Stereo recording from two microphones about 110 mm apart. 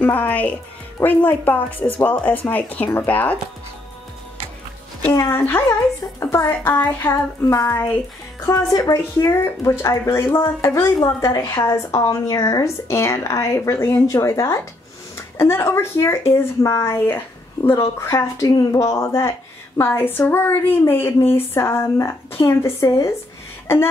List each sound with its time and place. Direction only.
0.0 s speech: 15° left (ahead or behind)
5.3 s a woman's voice: 20° left (ahead or behind)